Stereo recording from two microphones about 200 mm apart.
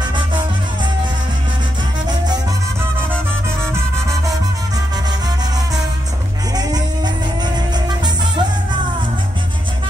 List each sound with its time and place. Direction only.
6.5 s music: 20° right (ahead or behind)